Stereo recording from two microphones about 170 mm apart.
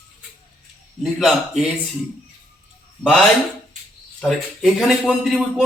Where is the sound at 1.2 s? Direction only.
Centre (ahead or behind).